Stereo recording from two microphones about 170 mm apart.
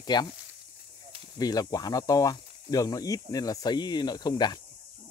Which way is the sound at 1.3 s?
20° left (ahead or behind).